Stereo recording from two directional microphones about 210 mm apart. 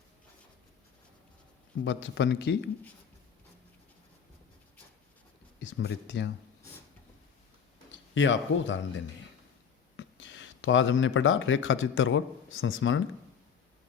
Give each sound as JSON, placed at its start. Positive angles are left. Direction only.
{"t": 1.8, "sound": "speech", "side_deg": 60}
{"t": 5.5, "sound": "speech", "side_deg": 60}
{"t": 8.1, "sound": "speech", "side_deg": 60}
{"t": 10.0, "sound": "speech", "side_deg": 60}